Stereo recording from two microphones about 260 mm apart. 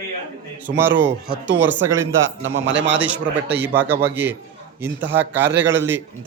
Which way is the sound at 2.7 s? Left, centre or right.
Right.